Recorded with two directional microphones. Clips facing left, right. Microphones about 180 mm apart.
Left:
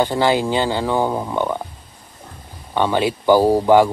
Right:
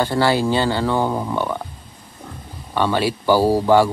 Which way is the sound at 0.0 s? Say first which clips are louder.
Left 1 dB; 15° left (ahead or behind).